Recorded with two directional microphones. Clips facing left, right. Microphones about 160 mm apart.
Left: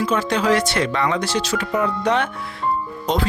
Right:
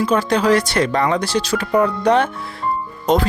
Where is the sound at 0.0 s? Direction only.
35° right (ahead or behind).